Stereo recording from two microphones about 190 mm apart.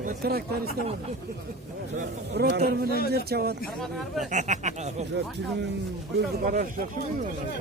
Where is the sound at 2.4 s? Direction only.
60° right (ahead or behind).